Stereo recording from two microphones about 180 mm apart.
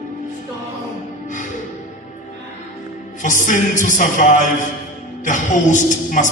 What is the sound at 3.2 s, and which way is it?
Speech, 45° left (ahead or behind).